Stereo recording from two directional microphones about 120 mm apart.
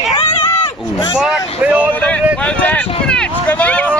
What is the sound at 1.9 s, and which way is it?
Speech, 15° left (ahead or behind).